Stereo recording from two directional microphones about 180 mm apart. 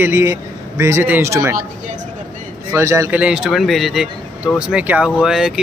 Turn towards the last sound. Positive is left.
turn(degrees=0)  # may be behind; listen again after turning